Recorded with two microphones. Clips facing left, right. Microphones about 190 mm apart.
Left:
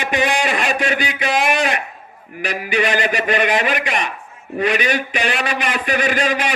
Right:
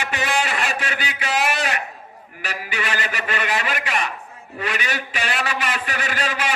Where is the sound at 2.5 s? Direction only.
20° left (ahead or behind).